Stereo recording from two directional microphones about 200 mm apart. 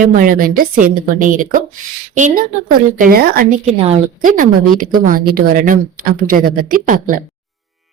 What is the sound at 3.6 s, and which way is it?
A woman's voice, 30° right (ahead or behind).